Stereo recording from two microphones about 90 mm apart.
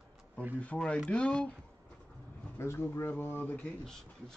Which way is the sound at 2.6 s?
30° left (ahead or behind).